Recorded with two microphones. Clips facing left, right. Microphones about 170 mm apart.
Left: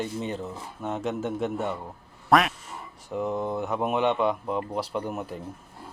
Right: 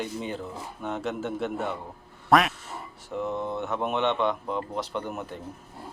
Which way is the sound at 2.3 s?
Centre (ahead or behind).